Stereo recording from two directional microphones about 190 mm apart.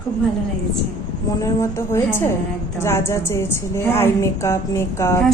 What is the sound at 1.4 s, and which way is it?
A woman's voice, 15° left (ahead or behind).